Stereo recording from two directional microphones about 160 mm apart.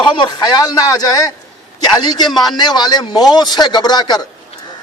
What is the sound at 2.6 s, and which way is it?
A man's voice, 25° left (ahead or behind).